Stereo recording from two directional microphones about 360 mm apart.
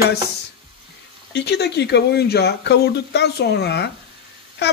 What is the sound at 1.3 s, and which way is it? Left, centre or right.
Speech, left.